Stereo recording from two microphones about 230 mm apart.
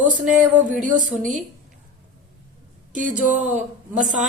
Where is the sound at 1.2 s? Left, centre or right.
Right.